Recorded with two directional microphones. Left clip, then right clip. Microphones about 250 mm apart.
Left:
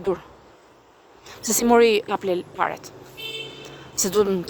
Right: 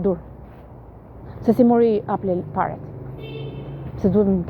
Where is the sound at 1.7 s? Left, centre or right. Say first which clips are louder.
Left 1 dB; left.